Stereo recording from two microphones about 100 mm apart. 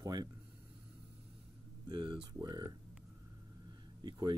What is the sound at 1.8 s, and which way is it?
Speech, 55° right (ahead or behind).